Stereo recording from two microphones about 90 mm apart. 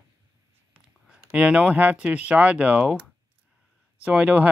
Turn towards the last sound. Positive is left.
turn(degrees=-15)  # may be behind; listen again after turning